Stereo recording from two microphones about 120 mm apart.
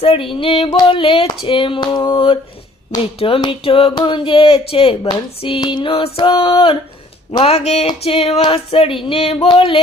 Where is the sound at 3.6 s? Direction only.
50° left (ahead or behind).